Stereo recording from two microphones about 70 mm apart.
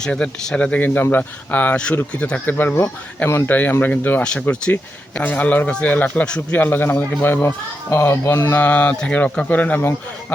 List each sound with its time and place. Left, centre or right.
0.0 s speech: centre; by 1.7 s left
1.7 s speech: centre
3.2 s speech: left
3.5 s speech: left
4.2 s speech: centre
6.6 s speech: left
8.4 s speech: left